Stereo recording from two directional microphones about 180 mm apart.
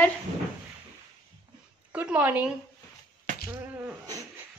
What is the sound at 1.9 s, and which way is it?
Speech, 10° right (ahead or behind).